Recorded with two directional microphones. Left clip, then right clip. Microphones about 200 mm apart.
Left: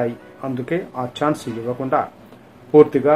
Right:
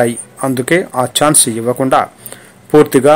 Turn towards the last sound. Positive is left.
turn(degrees=-45)  # may be behind; listen again after turning